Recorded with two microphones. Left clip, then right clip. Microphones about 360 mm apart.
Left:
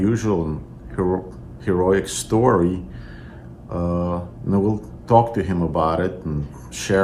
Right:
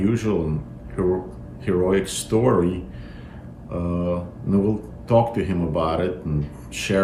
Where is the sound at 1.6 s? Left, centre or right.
Centre.